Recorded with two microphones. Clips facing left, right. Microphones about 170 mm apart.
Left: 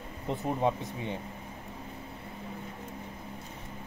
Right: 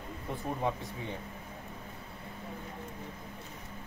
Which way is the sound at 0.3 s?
20° left (ahead or behind).